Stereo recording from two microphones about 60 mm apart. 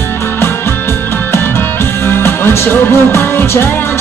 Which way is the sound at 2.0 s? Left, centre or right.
Left.